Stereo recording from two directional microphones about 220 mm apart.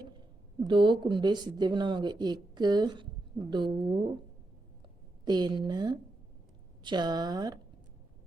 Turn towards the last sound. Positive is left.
turn(degrees=-15)  # may be behind; listen again after turning